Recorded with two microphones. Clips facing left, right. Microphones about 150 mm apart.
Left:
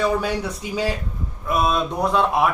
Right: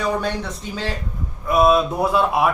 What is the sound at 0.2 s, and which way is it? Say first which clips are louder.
Speech: left 1 dB; 10° left (ahead or behind).